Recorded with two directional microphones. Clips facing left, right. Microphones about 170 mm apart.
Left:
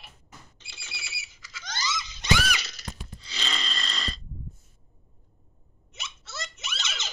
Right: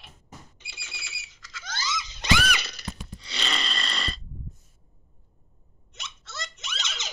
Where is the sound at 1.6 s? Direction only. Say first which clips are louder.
Even; 5° right (ahead or behind).